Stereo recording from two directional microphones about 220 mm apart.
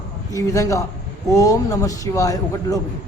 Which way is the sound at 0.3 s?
15° left (ahead or behind).